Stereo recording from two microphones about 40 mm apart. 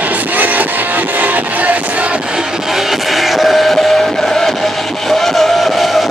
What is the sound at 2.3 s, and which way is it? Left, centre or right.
Train, centre.